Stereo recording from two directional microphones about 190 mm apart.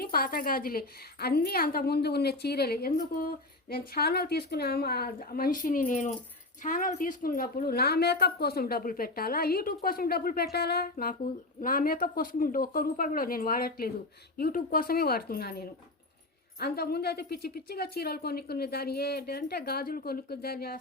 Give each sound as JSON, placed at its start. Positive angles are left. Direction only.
{"t": 0.0, "sound": "a woman's voice", "side_deg": 50}